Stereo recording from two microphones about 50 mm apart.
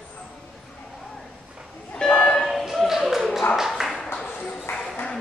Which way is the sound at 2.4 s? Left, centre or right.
Centre.